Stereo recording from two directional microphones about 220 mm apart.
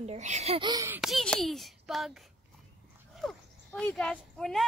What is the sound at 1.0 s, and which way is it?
Speech, centre (ahead or behind).